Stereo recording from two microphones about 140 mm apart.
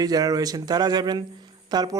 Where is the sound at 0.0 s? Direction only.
25° right (ahead or behind).